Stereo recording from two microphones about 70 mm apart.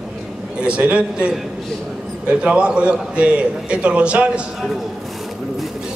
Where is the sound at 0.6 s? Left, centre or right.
Centre.